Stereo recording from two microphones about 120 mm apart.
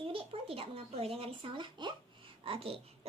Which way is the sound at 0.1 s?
50° right (ahead or behind).